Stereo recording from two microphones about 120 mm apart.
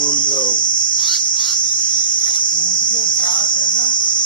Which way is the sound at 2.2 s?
40° left (ahead or behind).